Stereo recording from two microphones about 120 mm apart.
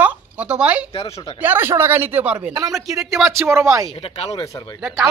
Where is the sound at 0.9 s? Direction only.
55° left (ahead or behind).